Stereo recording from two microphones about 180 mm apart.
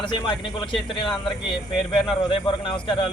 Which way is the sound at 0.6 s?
25° left (ahead or behind).